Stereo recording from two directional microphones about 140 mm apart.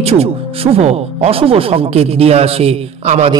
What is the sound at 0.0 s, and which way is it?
Speech, 45° right (ahead or behind).